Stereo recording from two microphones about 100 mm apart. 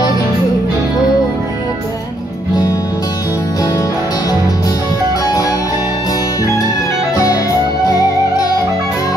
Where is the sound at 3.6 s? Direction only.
40° left (ahead or behind).